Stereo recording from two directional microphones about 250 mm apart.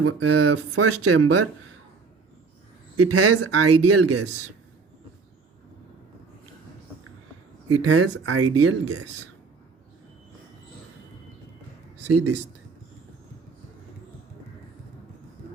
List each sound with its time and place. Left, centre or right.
0.0 s speech: right
3.0 s speech: right
7.7 s speech: right
12.1 s speech: right